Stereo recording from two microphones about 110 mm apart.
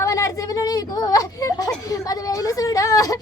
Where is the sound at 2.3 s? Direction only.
30° left (ahead or behind).